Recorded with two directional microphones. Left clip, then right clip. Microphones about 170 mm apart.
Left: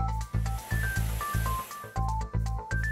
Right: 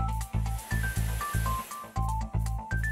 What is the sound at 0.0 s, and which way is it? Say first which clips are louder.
Music: left 1 dB; centre (ahead or behind).